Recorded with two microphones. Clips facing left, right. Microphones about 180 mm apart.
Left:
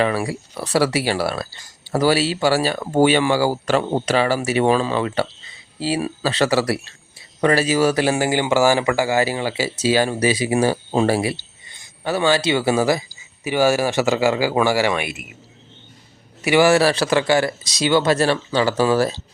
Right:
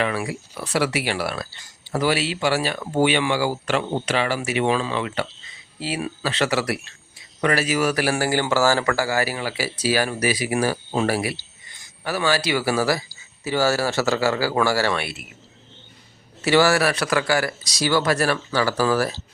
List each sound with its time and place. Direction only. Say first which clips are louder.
0.0 s speech: left 4 dB; 35° left (ahead or behind); by 15.2 s 15° left (ahead or behind)
16.4 s speech: left 3 dB; 15° left (ahead or behind)